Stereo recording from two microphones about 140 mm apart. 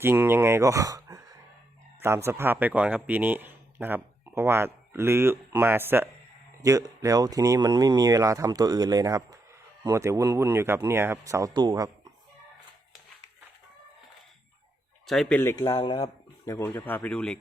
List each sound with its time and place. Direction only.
0.0 s speech: 15° right (ahead or behind); by 11.9 s 30° right (ahead or behind)
15.0 s speech: centre (ahead or behind)
15.7 s speech: 40° left (ahead or behind)
16.5 s speech: 15° left (ahead or behind)